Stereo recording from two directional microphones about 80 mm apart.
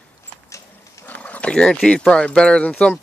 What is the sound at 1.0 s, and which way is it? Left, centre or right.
Dog, centre.